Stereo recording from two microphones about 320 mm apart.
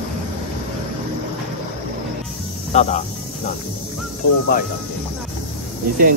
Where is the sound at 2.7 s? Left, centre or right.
Left.